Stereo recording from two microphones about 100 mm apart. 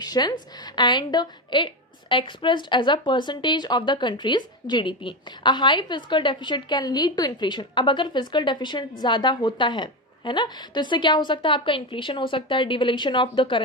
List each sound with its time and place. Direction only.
0.0 s a woman's voice: 45° left (ahead or behind)